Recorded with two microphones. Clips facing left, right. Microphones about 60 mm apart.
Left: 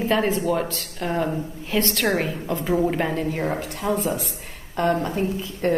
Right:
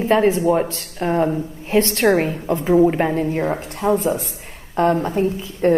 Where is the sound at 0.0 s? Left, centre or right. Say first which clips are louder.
Right 6 dB; right.